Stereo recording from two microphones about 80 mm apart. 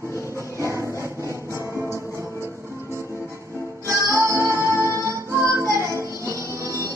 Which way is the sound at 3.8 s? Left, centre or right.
Right.